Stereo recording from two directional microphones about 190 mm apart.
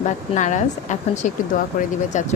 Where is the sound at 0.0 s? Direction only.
40° left (ahead or behind).